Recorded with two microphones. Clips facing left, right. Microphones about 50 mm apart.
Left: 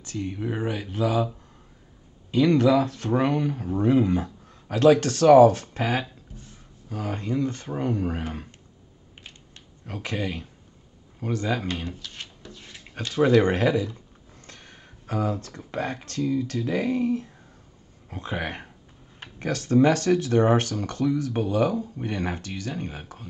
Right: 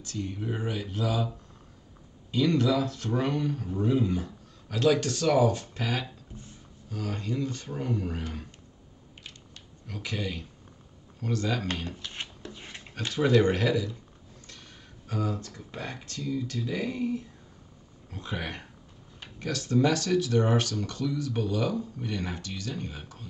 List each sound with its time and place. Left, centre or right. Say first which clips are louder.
0.0 s speech: left 4 dB; left
2.3 s speech: left 6 dB; left
3.8 s speech: left 6 dB; left
4.6 s speech: left 7 dB; left
5.8 s speech: left 5 dB; left
9.8 s speech: left 4 dB; left
11.1 s speech: left 3 dB; left
12.0 s speech: right 1 dB; right
12.4 s dog: right 2 dB; right
13.4 s speech: left 4 dB; left
14.5 s a sound: left 3 dB; left
15.0 s speech: left 5 dB; left
18.1 s speech: left 5 dB; left